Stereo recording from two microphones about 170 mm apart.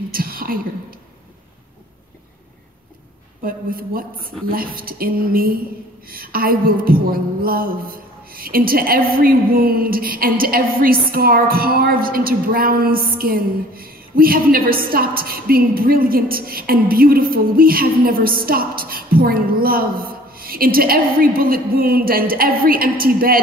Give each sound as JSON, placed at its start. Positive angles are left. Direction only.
{"t": 0.1, "sound": "whispering", "side_deg": -60}
{"t": 3.4, "sound": "a woman's voice", "side_deg": -60}